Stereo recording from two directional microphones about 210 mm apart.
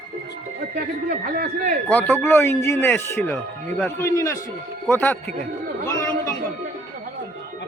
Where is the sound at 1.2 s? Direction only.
45° right (ahead or behind).